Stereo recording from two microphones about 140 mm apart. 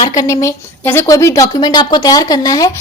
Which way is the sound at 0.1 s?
25° left (ahead or behind).